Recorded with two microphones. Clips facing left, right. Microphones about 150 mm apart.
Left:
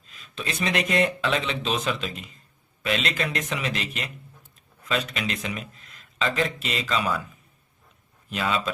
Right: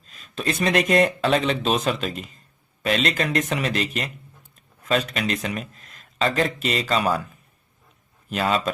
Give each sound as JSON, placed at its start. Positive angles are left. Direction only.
{"t": 0.1, "sound": "a man's voice", "side_deg": -45}
{"t": 8.3, "sound": "a man's voice", "side_deg": -45}